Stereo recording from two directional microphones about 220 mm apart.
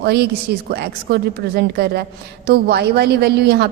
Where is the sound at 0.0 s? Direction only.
50° right (ahead or behind).